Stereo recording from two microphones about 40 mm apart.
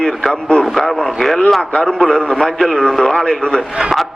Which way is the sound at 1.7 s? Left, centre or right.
Left.